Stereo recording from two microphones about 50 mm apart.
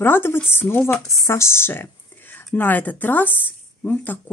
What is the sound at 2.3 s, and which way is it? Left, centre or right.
A woman's voice, left.